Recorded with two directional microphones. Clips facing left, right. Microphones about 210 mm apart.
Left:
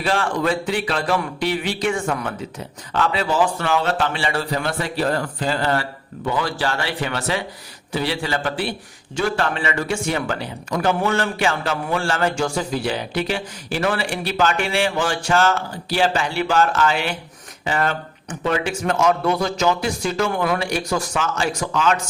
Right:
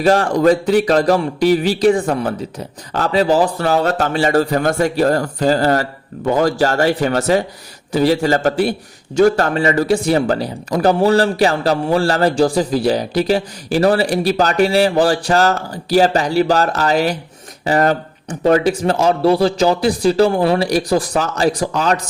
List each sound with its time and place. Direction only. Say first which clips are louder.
0.0 s a man's voice: right 8 dB; 40° right (ahead or behind)